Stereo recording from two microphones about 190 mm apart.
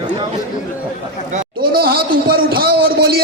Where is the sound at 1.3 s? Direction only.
50° right (ahead or behind).